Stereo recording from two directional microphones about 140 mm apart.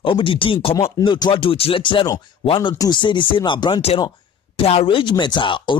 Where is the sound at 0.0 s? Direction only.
40° left (ahead or behind).